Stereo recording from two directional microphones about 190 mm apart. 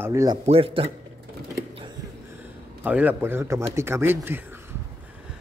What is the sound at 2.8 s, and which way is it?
Speech, 10° right (ahead or behind).